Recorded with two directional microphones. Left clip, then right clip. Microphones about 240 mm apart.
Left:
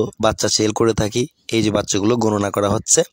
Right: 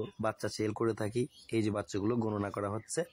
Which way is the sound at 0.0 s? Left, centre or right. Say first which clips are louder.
Left 17 dB; left.